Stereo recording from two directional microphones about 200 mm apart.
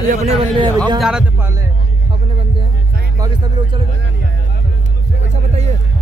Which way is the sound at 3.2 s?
20° right (ahead or behind).